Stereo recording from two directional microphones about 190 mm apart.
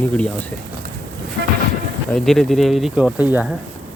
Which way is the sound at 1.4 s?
65° right (ahead or behind).